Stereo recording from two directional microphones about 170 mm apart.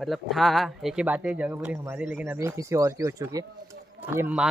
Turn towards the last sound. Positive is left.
turn(degrees=-10)  # may be behind; listen again after turning